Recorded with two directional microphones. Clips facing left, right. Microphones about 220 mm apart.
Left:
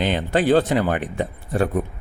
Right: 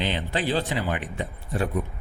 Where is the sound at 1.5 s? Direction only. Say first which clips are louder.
Left 5 dB; 65° left (ahead or behind).